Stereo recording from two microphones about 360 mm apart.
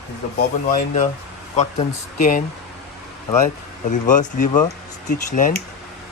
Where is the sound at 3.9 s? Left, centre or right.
Left.